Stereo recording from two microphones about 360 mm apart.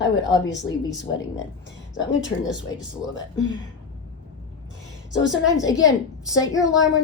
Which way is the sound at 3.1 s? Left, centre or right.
Left.